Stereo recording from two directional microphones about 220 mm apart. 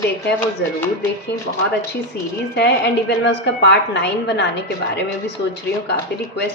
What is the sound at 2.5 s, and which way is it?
A woman's voice, 50° left (ahead or behind).